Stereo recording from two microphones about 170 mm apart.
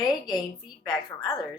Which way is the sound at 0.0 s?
25° left (ahead or behind).